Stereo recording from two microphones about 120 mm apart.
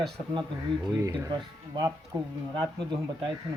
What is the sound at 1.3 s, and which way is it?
Speech, 40° right (ahead or behind).